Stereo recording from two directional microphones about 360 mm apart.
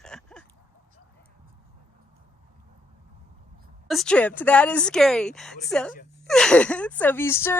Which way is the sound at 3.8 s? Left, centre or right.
Centre.